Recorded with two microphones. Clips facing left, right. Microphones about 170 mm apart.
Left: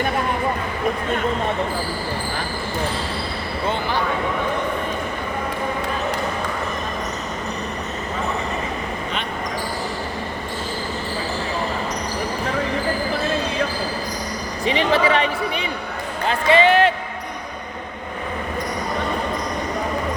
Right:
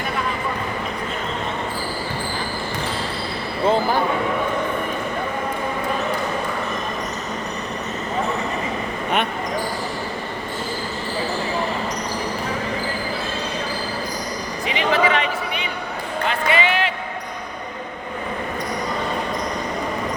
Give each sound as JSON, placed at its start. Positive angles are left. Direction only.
{"t": 3.7, "sound": "speech", "side_deg": -40}
{"t": 14.6, "sound": "a sound", "side_deg": 30}
{"t": 16.2, "sound": "basketball bounce", "side_deg": 35}